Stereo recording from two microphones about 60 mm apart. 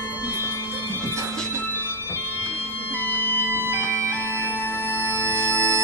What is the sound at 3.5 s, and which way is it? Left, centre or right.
Bagpipes, right.